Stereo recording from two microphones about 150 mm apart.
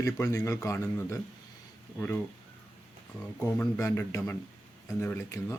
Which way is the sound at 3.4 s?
20° left (ahead or behind).